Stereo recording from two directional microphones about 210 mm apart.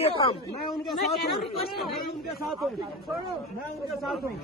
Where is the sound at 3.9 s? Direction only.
Centre (ahead or behind).